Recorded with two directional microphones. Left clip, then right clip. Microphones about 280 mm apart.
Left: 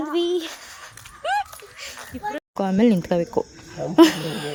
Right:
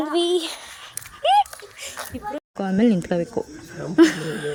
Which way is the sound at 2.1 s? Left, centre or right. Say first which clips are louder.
Left 4 dB; centre.